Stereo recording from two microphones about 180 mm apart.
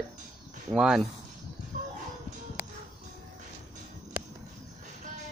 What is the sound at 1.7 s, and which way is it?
Music, 45° right (ahead or behind).